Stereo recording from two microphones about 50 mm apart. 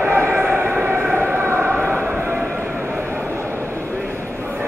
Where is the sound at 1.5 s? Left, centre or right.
Right.